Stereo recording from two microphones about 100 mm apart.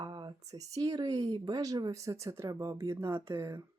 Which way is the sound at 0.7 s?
40° right (ahead or behind).